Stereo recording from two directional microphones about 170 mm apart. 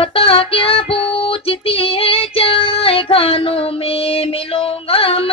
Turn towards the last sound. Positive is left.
turn(degrees=35)  # may be behind; listen again after turning